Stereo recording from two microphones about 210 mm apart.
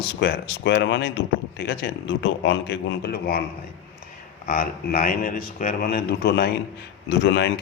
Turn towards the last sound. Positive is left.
turn(degrees=55)  # may be behind; listen again after turning